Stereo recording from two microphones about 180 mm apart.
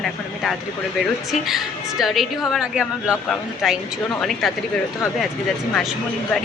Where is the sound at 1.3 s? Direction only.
Centre (ahead or behind).